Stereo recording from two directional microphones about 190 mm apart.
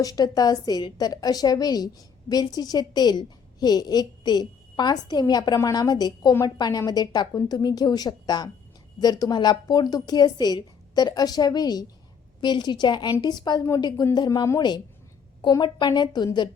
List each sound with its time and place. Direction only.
0.0 s a woman's voice: 20° left (ahead or behind)